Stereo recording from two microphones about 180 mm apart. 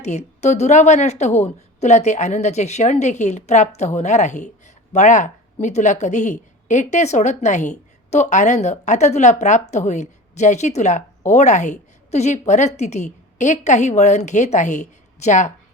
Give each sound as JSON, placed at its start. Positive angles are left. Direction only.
{"t": 0.0, "sound": "a woman's voice", "side_deg": 40}